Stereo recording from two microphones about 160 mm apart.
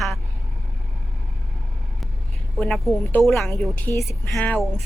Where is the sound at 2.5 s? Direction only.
5° left (ahead or behind).